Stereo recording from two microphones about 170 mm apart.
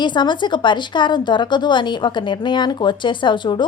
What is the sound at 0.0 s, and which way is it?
Speech, 25° left (ahead or behind).